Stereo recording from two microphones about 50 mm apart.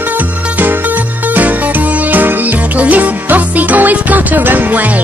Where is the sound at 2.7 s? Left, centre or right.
Right.